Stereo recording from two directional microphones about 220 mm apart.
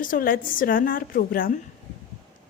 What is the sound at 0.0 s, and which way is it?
A woman's voice, 40° left (ahead or behind).